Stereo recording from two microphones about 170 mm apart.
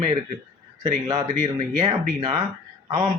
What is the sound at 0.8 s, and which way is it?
A man's voice, 20° right (ahead or behind).